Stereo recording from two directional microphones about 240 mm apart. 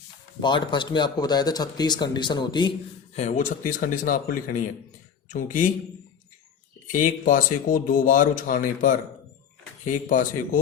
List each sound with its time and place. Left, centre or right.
0.4 s speech: centre
3.2 s speech: left
6.9 s speech: left